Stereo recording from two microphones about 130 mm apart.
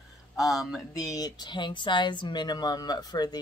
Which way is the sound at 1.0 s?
30° left (ahead or behind).